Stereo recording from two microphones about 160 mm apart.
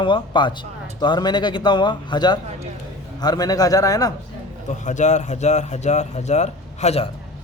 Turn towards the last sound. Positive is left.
turn(degrees=45)  # may be behind; listen again after turning